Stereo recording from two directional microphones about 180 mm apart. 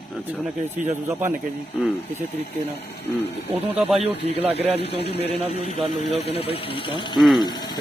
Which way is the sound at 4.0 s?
35° right (ahead or behind).